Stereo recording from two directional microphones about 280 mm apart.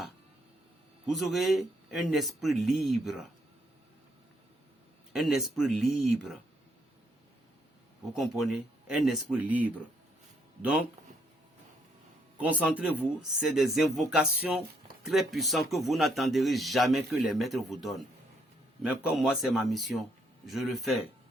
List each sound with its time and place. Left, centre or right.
1.0 s speech: centre
5.1 s speech: centre
8.1 s speech: centre
12.4 s speech: centre